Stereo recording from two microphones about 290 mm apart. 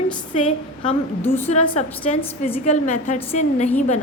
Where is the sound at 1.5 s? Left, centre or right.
Left.